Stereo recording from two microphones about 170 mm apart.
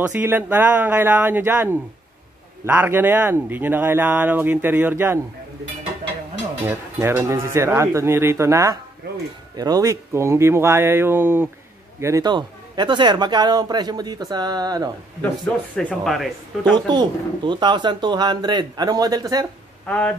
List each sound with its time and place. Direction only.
0.0 s speech: 10° right (ahead or behind)
6.7 s speech: 15° right (ahead or behind)
9.0 s a sound: 70° right (ahead or behind)
9.6 s a man's voice: 20° right (ahead or behind)
15.2 s speech: 10° left (ahead or behind)
16.7 s a man's voice: 25° right (ahead or behind)